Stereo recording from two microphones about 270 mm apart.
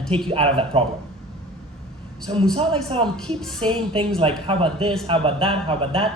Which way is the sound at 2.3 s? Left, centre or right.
Right.